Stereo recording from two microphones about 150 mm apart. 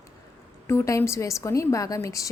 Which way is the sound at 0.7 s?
20° left (ahead or behind).